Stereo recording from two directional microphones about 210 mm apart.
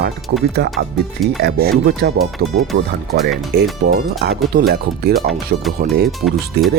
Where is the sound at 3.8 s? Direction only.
50° right (ahead or behind).